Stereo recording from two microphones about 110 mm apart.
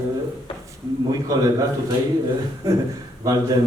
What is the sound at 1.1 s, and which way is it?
Speech, 30° right (ahead or behind).